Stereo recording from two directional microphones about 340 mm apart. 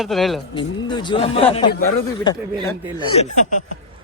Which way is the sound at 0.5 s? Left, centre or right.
Centre.